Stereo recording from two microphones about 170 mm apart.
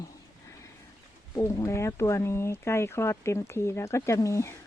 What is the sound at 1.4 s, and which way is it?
Speech, 15° left (ahead or behind).